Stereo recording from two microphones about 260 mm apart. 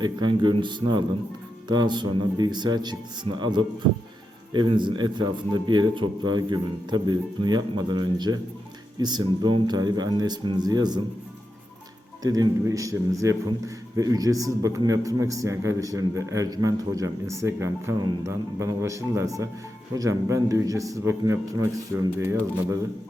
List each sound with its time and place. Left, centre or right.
0.0 s a man's voice: centre
12.2 s a man's voice: centre